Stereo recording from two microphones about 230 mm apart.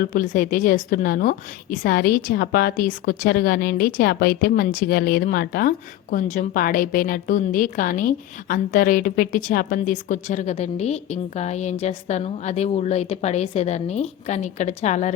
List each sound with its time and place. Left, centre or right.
0.0 s a woman's voice: left